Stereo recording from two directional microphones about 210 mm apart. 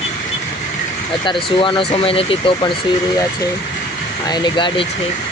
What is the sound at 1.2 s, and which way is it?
Speech, 25° left (ahead or behind).